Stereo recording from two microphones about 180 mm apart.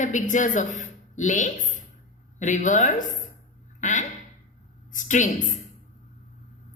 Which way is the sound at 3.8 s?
45° left (ahead or behind).